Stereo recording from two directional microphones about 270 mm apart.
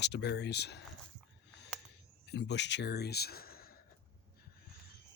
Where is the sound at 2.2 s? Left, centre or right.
Left.